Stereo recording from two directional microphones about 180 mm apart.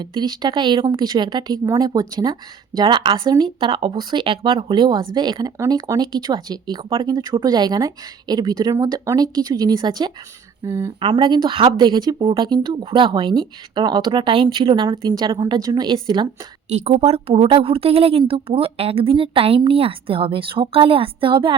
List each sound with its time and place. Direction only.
0.0 s speech: 25° right (ahead or behind)
16.6 s speech: 40° right (ahead or behind)